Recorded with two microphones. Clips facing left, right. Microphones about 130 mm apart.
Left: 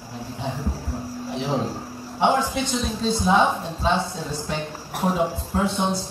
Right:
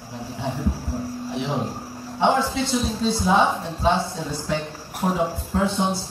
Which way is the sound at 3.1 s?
15° left (ahead or behind).